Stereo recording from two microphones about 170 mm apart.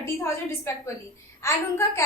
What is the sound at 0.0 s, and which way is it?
A woman's voice, 15° left (ahead or behind).